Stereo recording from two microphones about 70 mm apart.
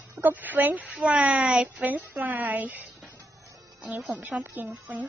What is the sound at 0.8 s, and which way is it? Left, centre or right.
A woman's voice, centre.